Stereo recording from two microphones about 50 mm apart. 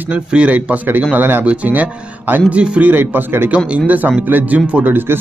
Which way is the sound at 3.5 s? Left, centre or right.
Right.